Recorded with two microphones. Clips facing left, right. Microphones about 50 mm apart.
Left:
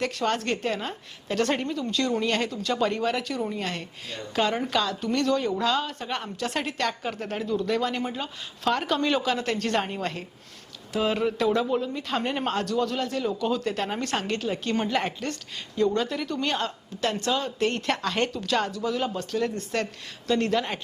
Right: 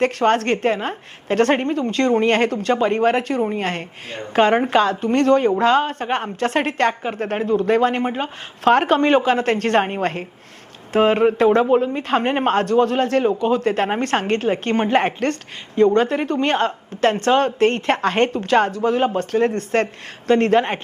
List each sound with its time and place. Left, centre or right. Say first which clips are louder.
0.0 s a woman's voice: right 9 dB; right